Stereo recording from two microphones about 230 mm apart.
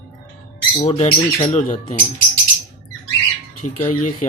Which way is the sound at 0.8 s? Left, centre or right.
Left.